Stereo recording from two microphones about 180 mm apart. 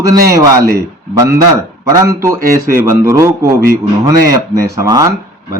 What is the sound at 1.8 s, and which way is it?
Speech, 15° right (ahead or behind).